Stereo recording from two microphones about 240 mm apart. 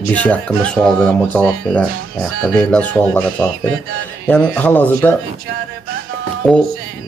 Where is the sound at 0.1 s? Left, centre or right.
Centre.